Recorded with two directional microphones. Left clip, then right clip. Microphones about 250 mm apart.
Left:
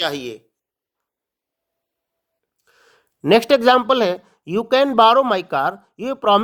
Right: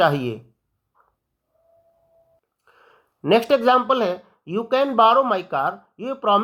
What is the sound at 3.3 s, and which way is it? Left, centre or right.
Speech, left.